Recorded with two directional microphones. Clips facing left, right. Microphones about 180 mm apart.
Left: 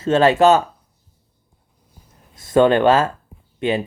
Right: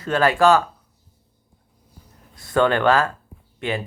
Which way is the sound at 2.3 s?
20° left (ahead or behind).